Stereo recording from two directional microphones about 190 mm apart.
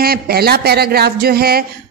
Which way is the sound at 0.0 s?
55° right (ahead or behind).